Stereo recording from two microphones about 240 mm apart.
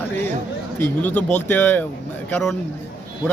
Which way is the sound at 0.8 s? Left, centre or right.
Centre.